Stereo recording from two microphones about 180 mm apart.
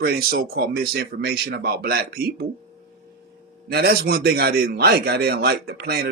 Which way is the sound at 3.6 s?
60° right (ahead or behind).